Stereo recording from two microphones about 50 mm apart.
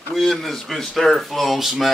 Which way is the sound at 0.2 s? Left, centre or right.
Centre.